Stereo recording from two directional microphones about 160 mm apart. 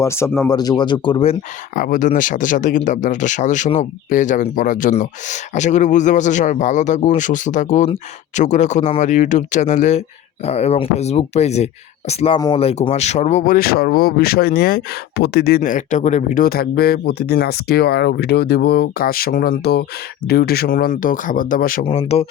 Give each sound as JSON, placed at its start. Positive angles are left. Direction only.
{"t": 0.0, "sound": "speech", "side_deg": 15}
{"t": 1.7, "sound": "speech", "side_deg": 60}
{"t": 21.9, "sound": "speech", "side_deg": 40}